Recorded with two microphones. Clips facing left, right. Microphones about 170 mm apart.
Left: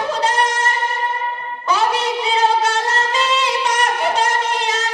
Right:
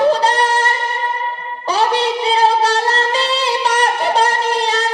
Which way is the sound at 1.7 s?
35° right (ahead or behind).